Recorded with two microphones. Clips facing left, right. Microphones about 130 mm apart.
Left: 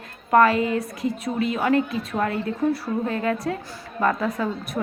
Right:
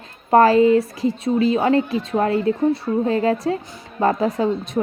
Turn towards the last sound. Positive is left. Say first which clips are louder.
# right 4 dB
turn(degrees=-25)  # may be behind; listen again after turning